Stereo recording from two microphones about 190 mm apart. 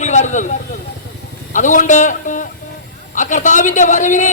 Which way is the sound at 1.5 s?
40° left (ahead or behind).